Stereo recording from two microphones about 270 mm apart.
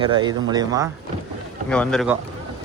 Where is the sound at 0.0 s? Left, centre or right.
Centre.